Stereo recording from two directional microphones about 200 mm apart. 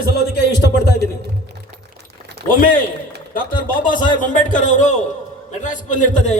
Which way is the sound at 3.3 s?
45° left (ahead or behind).